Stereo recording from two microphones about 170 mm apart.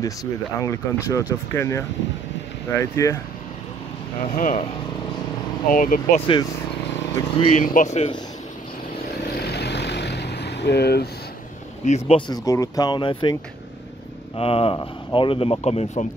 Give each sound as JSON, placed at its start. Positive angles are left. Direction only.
{"t": 0.0, "sound": "speech", "side_deg": 20}
{"t": 4.4, "sound": "speech", "side_deg": 50}
{"t": 5.7, "sound": "speech", "side_deg": 50}
{"t": 7.3, "sound": "speech", "side_deg": 35}
{"t": 7.6, "sound": "speech", "side_deg": 50}
{"t": 9.4, "sound": "vehicle", "side_deg": 75}
{"t": 11.8, "sound": "speech", "side_deg": 45}
{"t": 12.3, "sound": "speech", "side_deg": 20}